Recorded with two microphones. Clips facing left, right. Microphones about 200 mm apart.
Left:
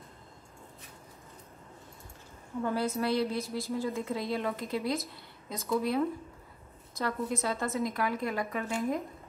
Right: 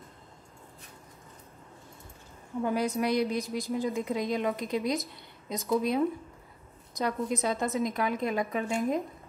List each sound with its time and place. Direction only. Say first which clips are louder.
2.6 s a woman's voice: right 2 dB; 15° right (ahead or behind)